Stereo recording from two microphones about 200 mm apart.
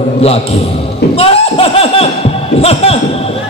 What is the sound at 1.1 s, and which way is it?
Laughter, 30° left (ahead or behind).